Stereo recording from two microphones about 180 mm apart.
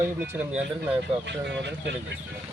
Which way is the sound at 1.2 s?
75° right (ahead or behind).